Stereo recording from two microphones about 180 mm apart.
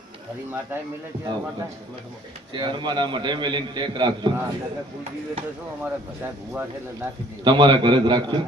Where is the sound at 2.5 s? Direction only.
25° right (ahead or behind).